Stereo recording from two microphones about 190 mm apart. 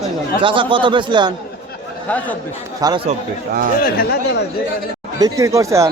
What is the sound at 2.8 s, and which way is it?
Speech, 20° right (ahead or behind).